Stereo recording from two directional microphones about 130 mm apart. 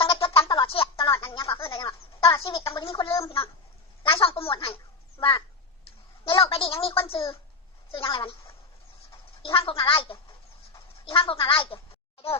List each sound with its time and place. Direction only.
0.0 s music: 45° left (ahead or behind)
1.2 s a sound: 40° left (ahead or behind)
2.4 s a woman's voice: 45° left (ahead or behind)
6.2 s speech: 40° left (ahead or behind)